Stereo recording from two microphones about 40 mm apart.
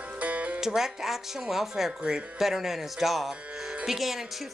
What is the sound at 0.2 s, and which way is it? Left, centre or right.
Music, right.